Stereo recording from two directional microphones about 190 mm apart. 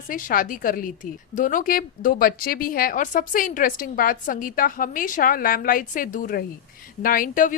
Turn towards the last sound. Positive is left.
turn(degrees=45)  # may be behind; listen again after turning